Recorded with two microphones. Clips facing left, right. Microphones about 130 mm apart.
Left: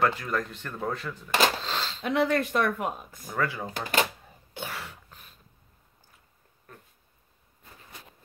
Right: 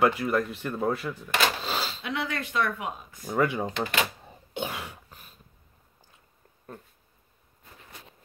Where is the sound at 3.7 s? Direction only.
40° left (ahead or behind).